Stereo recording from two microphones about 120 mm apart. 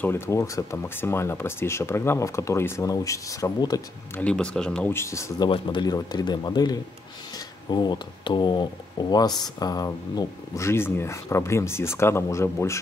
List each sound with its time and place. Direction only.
0.0 s speech: 20° left (ahead or behind)
4.2 s speech: 10° left (ahead or behind)
4.9 s speech: 25° left (ahead or behind)
5.5 s speech: 40° left (ahead or behind); by 12.8 s 25° left (ahead or behind)